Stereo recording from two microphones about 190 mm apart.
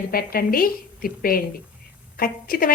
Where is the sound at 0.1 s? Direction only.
50° left (ahead or behind).